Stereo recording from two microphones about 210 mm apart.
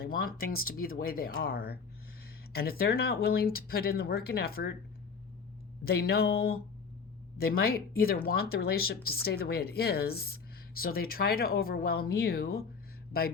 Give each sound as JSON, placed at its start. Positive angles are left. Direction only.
{"t": 0.0, "sound": "speech", "side_deg": 45}
{"t": 5.8, "sound": "speech", "side_deg": 50}